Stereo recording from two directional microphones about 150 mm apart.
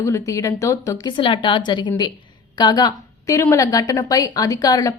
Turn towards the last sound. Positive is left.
turn(degrees=25)  # may be behind; listen again after turning